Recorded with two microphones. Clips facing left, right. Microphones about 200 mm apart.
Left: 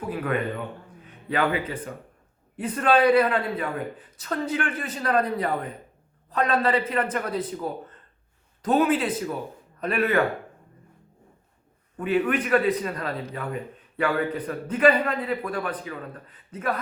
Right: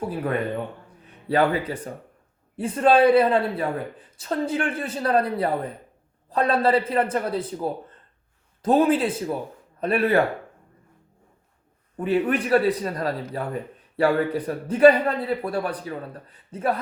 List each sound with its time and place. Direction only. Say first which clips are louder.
0.1 s a man's voice: left 3 dB; 30° right (ahead or behind)
2.6 s a man's voice: right 3 dB; 30° right (ahead or behind)
11.9 s a man's voice: right 1 dB; 30° right (ahead or behind)